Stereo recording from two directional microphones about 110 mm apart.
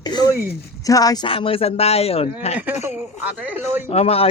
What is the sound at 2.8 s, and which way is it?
Speech, 15° right (ahead or behind).